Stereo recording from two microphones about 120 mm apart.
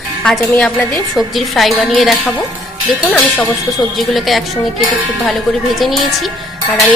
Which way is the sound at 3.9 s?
Centre (ahead or behind).